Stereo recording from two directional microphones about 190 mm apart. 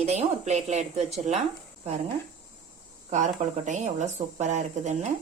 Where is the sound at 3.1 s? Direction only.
40° right (ahead or behind).